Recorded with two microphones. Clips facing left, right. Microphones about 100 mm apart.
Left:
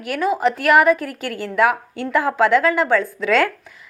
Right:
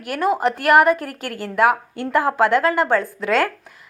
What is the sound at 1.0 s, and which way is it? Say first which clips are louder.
Speech: left 2 dB; 50° right (ahead or behind).